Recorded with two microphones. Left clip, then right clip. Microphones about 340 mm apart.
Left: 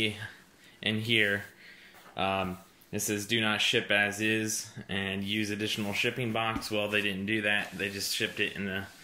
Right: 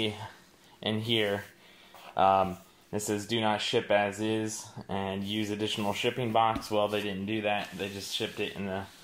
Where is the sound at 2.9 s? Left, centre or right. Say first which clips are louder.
Even; right.